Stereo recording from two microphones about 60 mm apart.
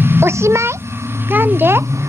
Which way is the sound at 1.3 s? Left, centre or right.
Right.